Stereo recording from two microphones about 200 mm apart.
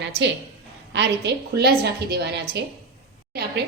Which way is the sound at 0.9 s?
60° right (ahead or behind).